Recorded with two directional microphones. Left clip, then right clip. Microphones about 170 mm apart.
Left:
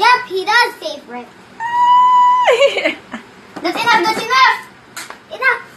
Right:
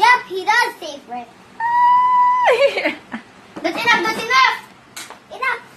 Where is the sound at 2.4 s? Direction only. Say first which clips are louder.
Left 3 dB; 15° right (ahead or behind).